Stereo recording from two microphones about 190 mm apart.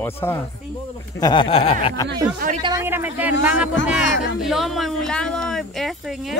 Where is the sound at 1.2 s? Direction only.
25° left (ahead or behind).